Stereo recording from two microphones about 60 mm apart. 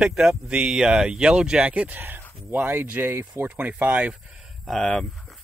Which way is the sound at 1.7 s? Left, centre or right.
Right.